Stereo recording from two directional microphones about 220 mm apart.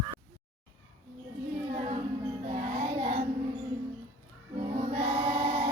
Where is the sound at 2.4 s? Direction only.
30° right (ahead or behind).